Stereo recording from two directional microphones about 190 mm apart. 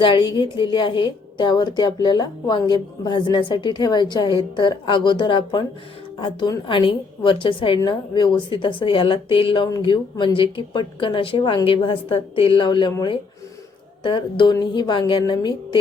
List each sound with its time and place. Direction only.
0.0 s a woman's voice: 25° left (ahead or behind)